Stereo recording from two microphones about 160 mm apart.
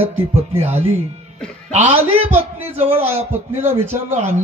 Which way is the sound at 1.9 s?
40° right (ahead or behind).